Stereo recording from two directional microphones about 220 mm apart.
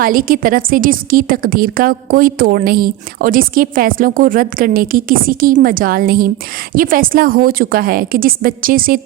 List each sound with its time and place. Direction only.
0.0 s a woman's voice: 40° right (ahead or behind)